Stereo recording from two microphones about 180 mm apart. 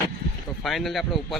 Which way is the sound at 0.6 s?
Centre (ahead or behind).